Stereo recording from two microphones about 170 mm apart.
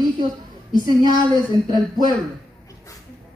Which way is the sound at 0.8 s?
25° right (ahead or behind).